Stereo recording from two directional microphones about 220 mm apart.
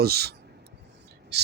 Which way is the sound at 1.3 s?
50° right (ahead or behind).